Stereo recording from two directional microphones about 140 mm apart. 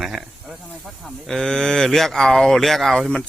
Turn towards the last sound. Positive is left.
turn(degrees=0)  # may be behind; listen again after turning